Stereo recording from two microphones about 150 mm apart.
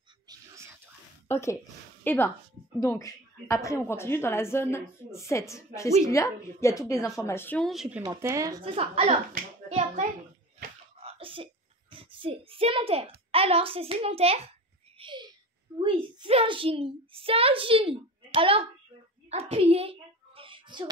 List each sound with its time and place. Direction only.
0.3 s whispering: 25° right (ahead or behind)
1.3 s a woman's voice: 20° left (ahead or behind)
7.6 s speech: 5° right (ahead or behind)
8.0 s speech: 20° right (ahead or behind)
8.6 s a child's voice: 40° right (ahead or behind)
9.7 s hands: 50° right (ahead or behind)
11.0 s sneeze: 35° right (ahead or behind)
11.9 s a child's voice: 35° right (ahead or behind)
15.0 s a sound: 30° right (ahead or behind)
15.8 s a child's voice: 35° right (ahead or behind)
19.2 s a sound: 45° right (ahead or behind)